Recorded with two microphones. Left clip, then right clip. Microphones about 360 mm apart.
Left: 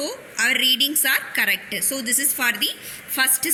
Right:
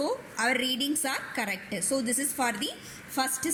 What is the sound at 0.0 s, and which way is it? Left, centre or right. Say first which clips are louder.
A woman's voice: left 5 dB; right.